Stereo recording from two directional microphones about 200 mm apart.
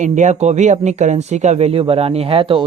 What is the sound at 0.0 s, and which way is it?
Speech, 35° right (ahead or behind).